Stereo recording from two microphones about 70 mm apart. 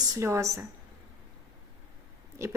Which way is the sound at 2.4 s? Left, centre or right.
Right.